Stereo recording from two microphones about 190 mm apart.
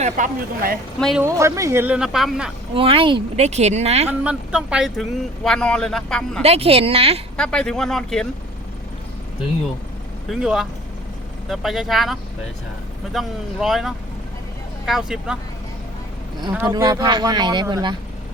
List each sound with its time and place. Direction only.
0.0 s speech: 45° right (ahead or behind)
0.9 s speech: centre (ahead or behind)
1.2 s speech: 15° right (ahead or behind)
2.7 s speech: 30° right (ahead or behind)
4.2 s speech: 5° right (ahead or behind)
6.4 s speech: 30° right (ahead or behind)
7.3 s speech: 5° left (ahead or behind)
10.2 s speech: 5° right (ahead or behind)
16.5 s speech: 5° right (ahead or behind)
16.7 s speech: 20° right (ahead or behind)